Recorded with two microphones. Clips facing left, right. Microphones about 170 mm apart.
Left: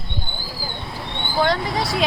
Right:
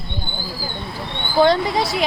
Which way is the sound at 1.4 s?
25° right (ahead or behind).